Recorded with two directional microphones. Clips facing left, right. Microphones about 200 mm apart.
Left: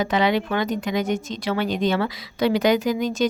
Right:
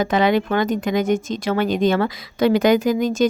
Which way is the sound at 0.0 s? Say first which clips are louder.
Right 3 dB; 50° right (ahead or behind).